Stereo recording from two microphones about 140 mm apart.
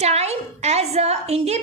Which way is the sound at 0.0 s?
50° right (ahead or behind).